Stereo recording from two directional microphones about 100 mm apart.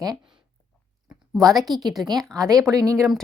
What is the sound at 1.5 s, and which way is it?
Speech, centre (ahead or behind).